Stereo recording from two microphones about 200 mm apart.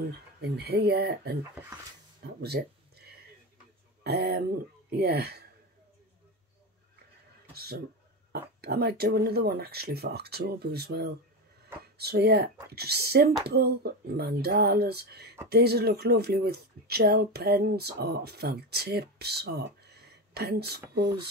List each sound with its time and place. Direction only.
0.4 s speech: 55° right (ahead or behind)
4.0 s speech: 55° right (ahead or behind)
7.5 s speech: 50° right (ahead or behind)